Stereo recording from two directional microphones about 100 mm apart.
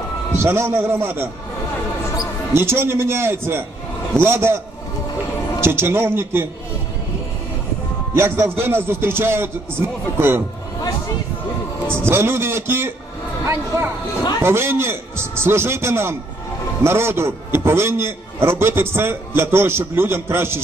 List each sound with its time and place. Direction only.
0.4 s a man's voice: 25° right (ahead or behind)
2.5 s a man's voice: 25° right (ahead or behind)
5.6 s a man's voice: 25° right (ahead or behind)
8.1 s a man's voice: 25° right (ahead or behind)
11.9 s a man's voice: 25° right (ahead or behind)